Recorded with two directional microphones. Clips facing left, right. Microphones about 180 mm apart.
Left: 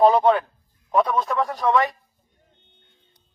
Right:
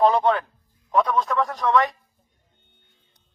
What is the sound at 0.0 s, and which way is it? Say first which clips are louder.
Speech: left 3 dB; 10° left (ahead or behind).